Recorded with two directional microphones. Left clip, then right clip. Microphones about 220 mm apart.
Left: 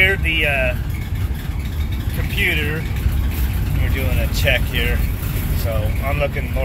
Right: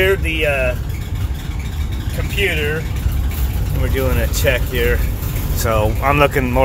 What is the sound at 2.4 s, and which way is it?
Speech, 15° right (ahead or behind).